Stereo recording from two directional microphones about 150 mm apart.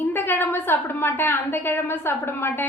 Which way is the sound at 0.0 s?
15° left (ahead or behind).